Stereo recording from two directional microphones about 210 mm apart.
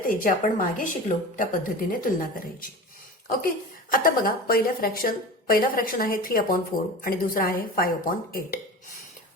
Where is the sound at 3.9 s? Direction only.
40° left (ahead or behind).